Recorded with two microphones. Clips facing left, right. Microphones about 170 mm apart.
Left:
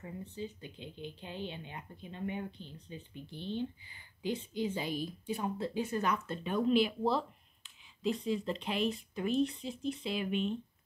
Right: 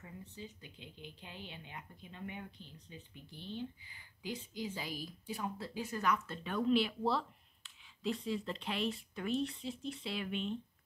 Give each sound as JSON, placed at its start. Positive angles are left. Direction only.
{"t": 0.0, "sound": "speech", "side_deg": 25}